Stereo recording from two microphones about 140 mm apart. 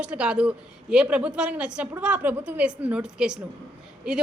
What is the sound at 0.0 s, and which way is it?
A man's voice, 5° right (ahead or behind).